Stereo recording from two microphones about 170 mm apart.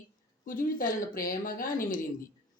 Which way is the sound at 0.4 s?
55° left (ahead or behind).